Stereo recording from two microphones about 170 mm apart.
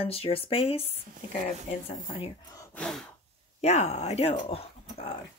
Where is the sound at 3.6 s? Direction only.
40° left (ahead or behind).